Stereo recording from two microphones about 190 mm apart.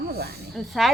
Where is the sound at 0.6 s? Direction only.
Centre (ahead or behind).